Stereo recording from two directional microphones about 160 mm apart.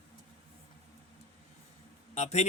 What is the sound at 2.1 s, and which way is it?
Speech, 45° left (ahead or behind).